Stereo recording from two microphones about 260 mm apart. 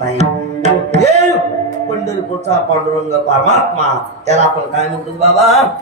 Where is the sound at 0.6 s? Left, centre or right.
Right.